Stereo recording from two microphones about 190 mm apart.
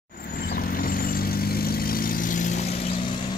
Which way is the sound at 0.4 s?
50° left (ahead or behind).